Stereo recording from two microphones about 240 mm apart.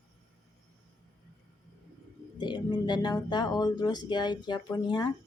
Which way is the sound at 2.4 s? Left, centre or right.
Centre.